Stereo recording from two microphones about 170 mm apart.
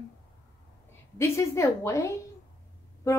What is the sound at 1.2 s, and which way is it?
Speech, 15° left (ahead or behind).